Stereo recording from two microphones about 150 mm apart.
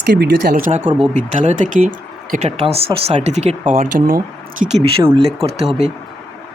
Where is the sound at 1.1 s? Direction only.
50° right (ahead or behind).